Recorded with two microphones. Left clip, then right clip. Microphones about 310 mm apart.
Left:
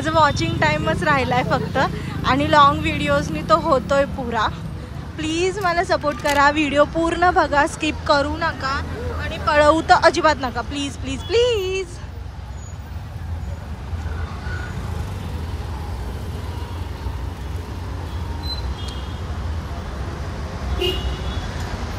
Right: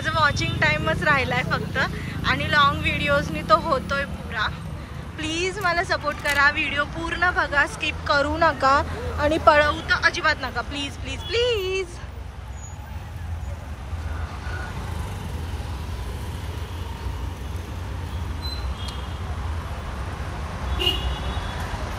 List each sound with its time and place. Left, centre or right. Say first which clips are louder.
0.0 s speech: left 4 dB; centre
9.5 s speech: left 5 dB; centre